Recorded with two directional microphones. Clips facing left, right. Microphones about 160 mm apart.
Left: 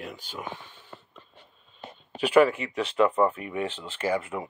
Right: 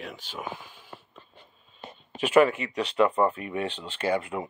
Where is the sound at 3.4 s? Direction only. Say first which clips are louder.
Even; 20° right (ahead or behind).